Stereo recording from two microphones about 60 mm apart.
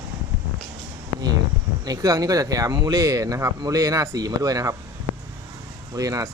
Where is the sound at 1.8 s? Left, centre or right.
Right.